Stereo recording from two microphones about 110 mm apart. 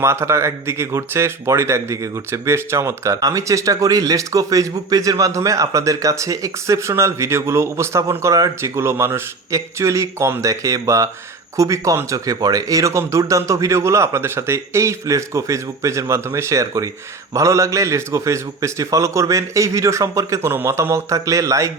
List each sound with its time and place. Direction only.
0.0 s speech: 25° right (ahead or behind)